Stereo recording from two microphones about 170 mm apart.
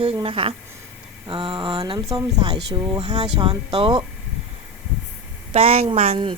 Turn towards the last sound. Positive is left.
turn(degrees=-35)  # may be behind; listen again after turning